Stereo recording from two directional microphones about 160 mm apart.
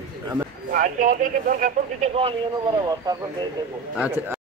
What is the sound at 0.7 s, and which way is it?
Speech, 55° right (ahead or behind).